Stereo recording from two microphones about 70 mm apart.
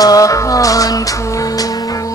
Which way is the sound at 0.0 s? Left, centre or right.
Left.